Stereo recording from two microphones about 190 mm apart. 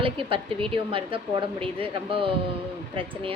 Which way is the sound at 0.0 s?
25° right (ahead or behind).